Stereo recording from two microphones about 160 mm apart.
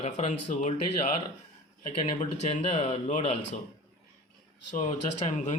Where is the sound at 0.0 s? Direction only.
45° left (ahead or behind).